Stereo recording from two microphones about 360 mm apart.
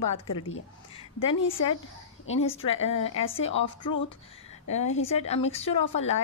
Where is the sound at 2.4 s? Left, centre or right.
Centre.